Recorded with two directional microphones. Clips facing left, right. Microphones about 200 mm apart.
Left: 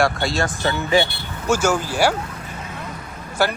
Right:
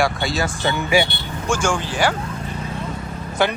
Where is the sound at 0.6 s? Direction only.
15° right (ahead or behind).